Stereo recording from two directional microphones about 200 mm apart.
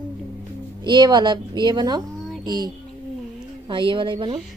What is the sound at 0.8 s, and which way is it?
A woman's voice, 20° right (ahead or behind).